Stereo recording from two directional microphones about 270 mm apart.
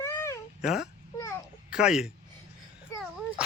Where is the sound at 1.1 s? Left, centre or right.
Centre.